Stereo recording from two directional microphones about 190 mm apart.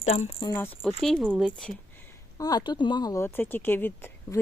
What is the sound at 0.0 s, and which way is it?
Speech, 35° left (ahead or behind).